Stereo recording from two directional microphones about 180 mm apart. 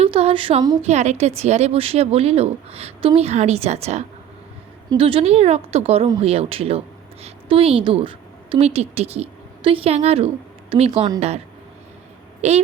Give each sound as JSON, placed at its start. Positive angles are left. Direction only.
{"t": 0.0, "sound": "speech", "side_deg": -30}
{"t": 0.8, "sound": "a woman's voice", "side_deg": -40}
{"t": 12.4, "sound": "a woman's voice", "side_deg": -35}